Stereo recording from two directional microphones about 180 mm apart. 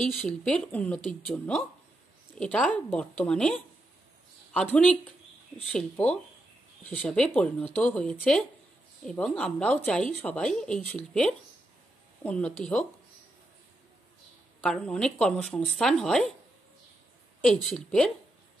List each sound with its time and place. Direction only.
0.0 s speech: centre (ahead or behind)
12.2 s speech: 5° left (ahead or behind)
14.6 s speech: 5° left (ahead or behind)
17.4 s speech: centre (ahead or behind)